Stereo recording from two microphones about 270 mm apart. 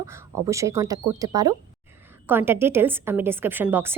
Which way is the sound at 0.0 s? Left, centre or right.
Centre.